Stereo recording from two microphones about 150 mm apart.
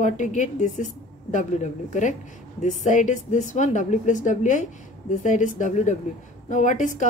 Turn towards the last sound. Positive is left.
turn(degrees=55)  # may be behind; listen again after turning